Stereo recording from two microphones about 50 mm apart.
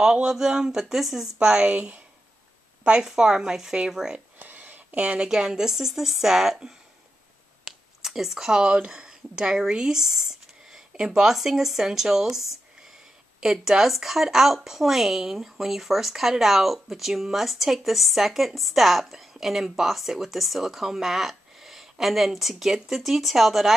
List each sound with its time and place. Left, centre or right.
0.0 s speech: centre
1.5 s speech: right
4.4 s a sound: right
5.0 s speech: centre
8.0 s a woman's voice: centre